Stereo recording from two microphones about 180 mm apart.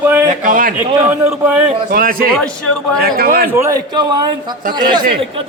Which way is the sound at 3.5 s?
15° right (ahead or behind).